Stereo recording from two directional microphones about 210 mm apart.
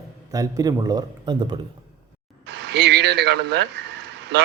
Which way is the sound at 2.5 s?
55° right (ahead or behind).